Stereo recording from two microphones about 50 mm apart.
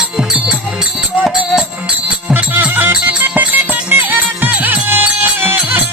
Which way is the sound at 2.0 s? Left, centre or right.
Right.